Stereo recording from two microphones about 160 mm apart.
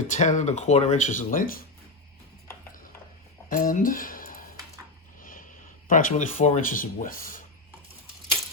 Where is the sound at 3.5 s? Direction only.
60° left (ahead or behind).